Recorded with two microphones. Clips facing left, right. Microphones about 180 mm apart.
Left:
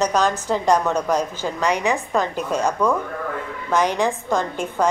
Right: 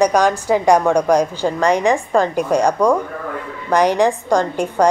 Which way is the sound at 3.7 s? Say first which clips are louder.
Right 5 dB; 15° right (ahead or behind).